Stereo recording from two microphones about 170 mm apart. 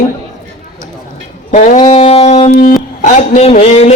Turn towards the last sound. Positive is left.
turn(degrees=35)  # may be behind; listen again after turning